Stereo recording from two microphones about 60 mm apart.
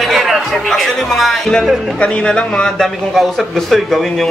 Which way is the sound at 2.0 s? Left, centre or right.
Centre.